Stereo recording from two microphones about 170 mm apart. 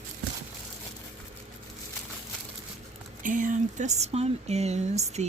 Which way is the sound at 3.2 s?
50° right (ahead or behind).